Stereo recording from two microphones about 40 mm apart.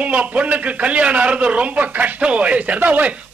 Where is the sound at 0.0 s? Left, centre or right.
Right.